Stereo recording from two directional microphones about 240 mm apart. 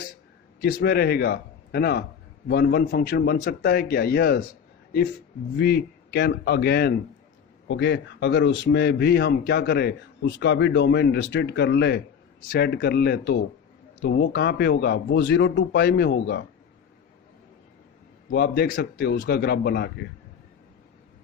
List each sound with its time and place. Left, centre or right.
0.6 s a man's voice: left
5.5 s a man's voice: left
18.3 s a man's voice: left